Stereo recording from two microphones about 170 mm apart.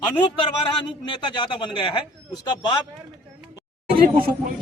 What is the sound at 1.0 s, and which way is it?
Speech, 30° left (ahead or behind).